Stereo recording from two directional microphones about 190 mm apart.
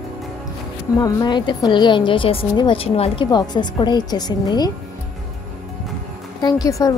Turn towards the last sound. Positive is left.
turn(degrees=15)  # may be behind; listen again after turning